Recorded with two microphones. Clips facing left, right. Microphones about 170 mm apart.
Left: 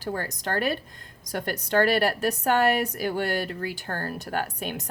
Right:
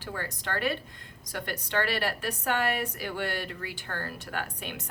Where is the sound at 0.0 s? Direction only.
40° left (ahead or behind).